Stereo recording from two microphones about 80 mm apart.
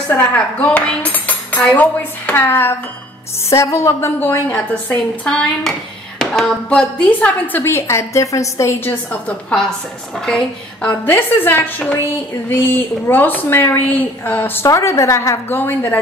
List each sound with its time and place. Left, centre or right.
0.1 s cutlery: centre
3.4 s speech: left
4.5 s a woman's voice: centre; by 8.9 s left
9.1 s a woman's voice: centre
10.9 s a woman's voice: left
14.7 s speech: left
15.5 s a woman's voice: left